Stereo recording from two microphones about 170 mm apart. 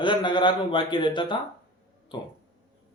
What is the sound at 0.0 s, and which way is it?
A man's voice, 30° left (ahead or behind).